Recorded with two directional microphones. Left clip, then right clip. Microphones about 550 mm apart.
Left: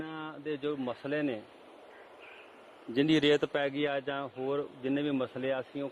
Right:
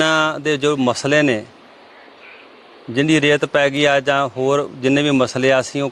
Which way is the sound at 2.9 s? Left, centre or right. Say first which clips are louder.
Right 11 dB; centre.